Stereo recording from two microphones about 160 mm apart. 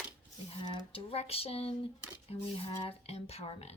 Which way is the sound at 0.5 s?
30° left (ahead or behind).